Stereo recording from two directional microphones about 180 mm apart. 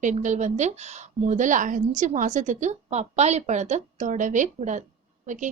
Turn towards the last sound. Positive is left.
turn(degrees=-45)  # may be behind; listen again after turning